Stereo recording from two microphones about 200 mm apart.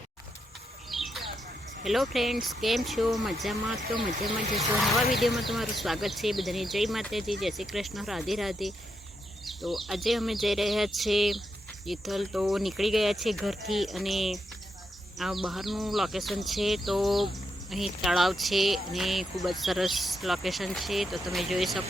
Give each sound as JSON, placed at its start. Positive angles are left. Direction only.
{"t": 0.9, "sound": "bird", "side_deg": 0}
{"t": 1.8, "sound": "speech", "side_deg": 0}
{"t": 4.1, "sound": "speech", "side_deg": -35}
{"t": 4.7, "sound": "speech", "side_deg": 0}
{"t": 15.4, "sound": "speech", "side_deg": 0}